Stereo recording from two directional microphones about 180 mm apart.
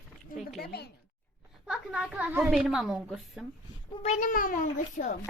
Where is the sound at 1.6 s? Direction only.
5° right (ahead or behind).